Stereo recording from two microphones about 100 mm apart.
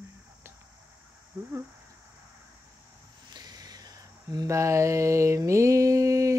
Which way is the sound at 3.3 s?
40° right (ahead or behind).